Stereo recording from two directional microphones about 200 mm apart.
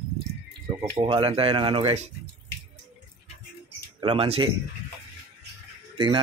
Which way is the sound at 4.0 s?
25° right (ahead or behind).